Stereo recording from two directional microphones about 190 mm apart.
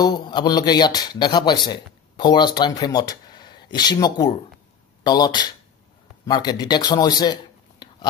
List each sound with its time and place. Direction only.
0.0 s speech: 20° left (ahead or behind)